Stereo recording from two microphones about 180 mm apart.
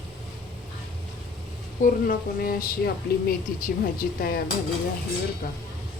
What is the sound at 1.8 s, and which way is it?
A woman's voice, 50° left (ahead or behind).